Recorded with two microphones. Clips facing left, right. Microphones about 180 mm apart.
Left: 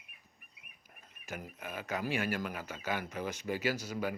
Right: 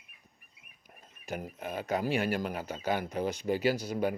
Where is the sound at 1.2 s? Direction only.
35° right (ahead or behind).